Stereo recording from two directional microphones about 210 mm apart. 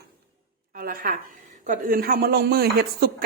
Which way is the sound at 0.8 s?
45° right (ahead or behind).